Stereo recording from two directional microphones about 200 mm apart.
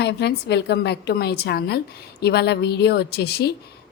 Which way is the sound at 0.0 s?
55° left (ahead or behind).